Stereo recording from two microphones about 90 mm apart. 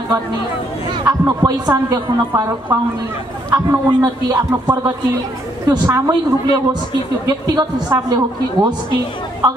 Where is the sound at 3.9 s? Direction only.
55° right (ahead or behind).